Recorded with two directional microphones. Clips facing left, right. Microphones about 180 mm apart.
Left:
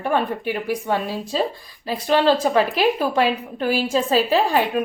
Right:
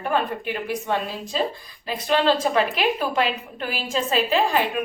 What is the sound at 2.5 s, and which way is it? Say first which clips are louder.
A woman's voice: left 3 dB; 35° left (ahead or behind).